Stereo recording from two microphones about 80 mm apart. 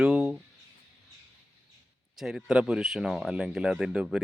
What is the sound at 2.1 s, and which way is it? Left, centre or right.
Speech, centre.